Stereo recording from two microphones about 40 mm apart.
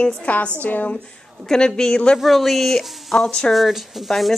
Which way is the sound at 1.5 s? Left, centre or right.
Centre.